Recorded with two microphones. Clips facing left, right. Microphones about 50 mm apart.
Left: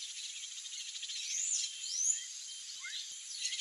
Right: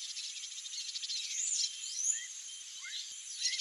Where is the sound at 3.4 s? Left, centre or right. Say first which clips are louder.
Right 3 dB; centre.